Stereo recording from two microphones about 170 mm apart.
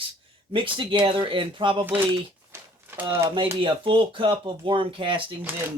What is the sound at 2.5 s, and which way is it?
Typewriter, 15° right (ahead or behind).